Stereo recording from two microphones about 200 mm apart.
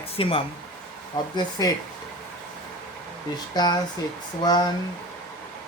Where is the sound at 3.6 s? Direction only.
20° left (ahead or behind).